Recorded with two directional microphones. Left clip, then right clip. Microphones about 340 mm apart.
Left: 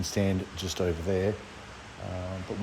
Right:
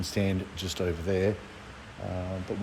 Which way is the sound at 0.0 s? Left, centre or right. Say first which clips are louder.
Left 1 dB; centre.